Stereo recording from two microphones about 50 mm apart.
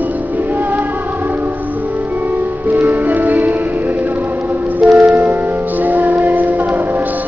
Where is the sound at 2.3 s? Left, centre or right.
Right.